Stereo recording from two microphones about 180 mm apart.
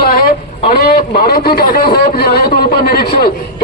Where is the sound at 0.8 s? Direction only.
60° left (ahead or behind).